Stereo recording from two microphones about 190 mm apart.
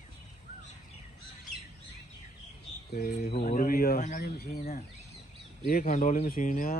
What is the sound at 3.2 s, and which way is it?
Speech, 45° left (ahead or behind).